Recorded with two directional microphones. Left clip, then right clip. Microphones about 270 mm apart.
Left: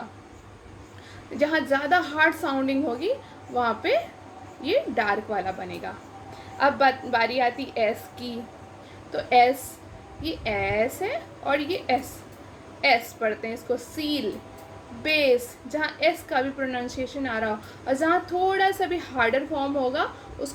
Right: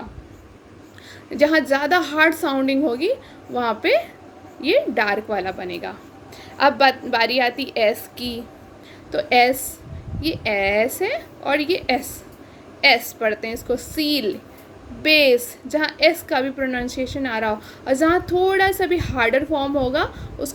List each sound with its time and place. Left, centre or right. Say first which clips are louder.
1.4 s a woman's voice: right 6 dB; right